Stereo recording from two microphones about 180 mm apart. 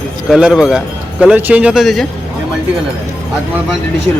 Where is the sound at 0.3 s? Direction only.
5° right (ahead or behind).